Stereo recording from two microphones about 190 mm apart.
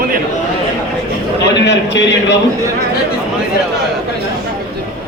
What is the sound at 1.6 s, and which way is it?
Speech, 65° left (ahead or behind).